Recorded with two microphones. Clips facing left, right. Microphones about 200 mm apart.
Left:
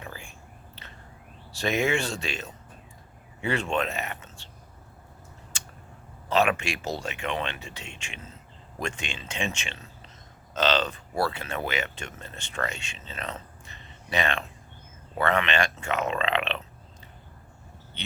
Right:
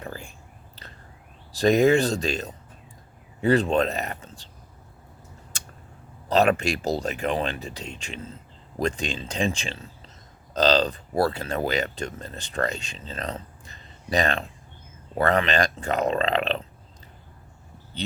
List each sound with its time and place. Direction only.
0.0 s whispering: 40° right (ahead or behind)
1.5 s speech: 40° right (ahead or behind)
6.2 s speech: 40° right (ahead or behind)